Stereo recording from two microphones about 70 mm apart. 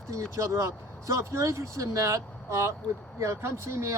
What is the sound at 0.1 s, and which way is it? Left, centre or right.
Speech, right.